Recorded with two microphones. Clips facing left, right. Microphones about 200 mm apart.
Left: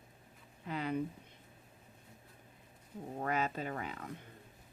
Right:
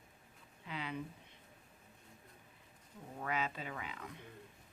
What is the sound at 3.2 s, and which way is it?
Speech, 45° left (ahead or behind).